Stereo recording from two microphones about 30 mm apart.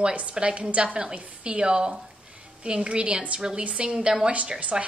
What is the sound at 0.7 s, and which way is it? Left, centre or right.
Speech, right.